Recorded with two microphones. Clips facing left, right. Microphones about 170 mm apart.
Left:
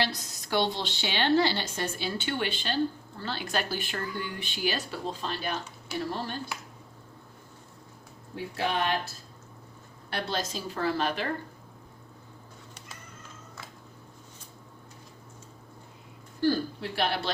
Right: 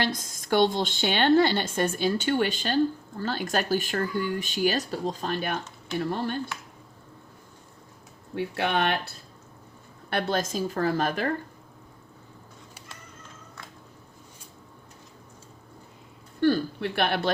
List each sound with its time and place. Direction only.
0.0 s a woman's voice: 45° right (ahead or behind)
8.4 s speech: 65° right (ahead or behind)
10.1 s a woman's voice: 55° right (ahead or behind)
16.4 s speech: 60° right (ahead or behind)